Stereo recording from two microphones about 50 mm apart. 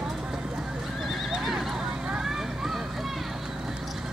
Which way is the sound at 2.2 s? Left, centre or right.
Centre.